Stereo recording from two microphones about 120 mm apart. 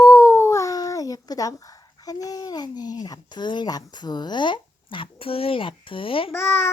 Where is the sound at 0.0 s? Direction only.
25° left (ahead or behind).